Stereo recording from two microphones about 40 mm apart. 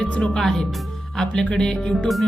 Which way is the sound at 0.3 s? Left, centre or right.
Centre.